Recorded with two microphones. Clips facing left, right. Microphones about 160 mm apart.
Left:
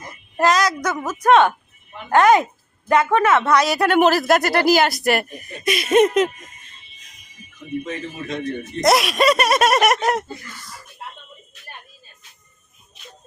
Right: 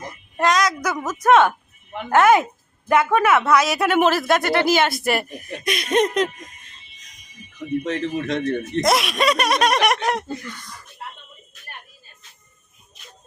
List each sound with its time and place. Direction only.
0.3 s a sound: centre (ahead or behind)
0.9 s a woman's voice: 10° left (ahead or behind)
2.0 s speech: 5° right (ahead or behind)
7.9 s a man's voice: 80° right
8.8 s speech: centre (ahead or behind)